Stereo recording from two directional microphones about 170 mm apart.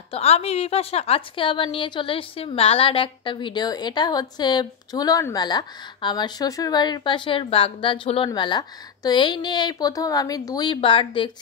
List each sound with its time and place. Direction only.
0.1 s a woman's voice: 35° left (ahead or behind)